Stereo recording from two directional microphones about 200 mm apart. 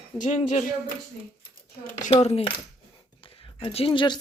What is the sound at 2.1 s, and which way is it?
Speech, 30° left (ahead or behind).